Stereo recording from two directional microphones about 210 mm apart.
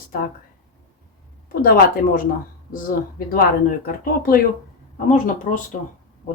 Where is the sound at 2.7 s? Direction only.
45° left (ahead or behind).